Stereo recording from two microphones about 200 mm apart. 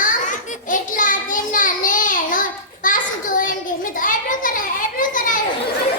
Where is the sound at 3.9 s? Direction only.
40° left (ahead or behind).